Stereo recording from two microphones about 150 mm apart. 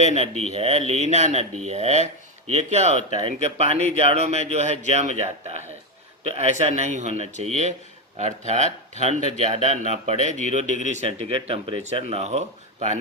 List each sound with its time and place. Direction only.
0.0 s speech: 45° right (ahead or behind)